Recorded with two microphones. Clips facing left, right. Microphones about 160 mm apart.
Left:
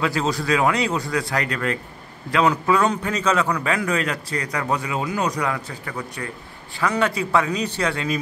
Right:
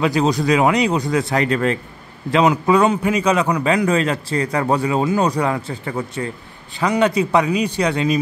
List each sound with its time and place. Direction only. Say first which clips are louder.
0.0 s a man's voice: right 6 dB; 20° right (ahead or behind)